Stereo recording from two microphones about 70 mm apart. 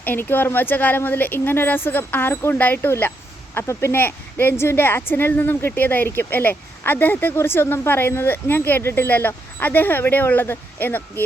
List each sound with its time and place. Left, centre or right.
0.0 s a woman's voice: left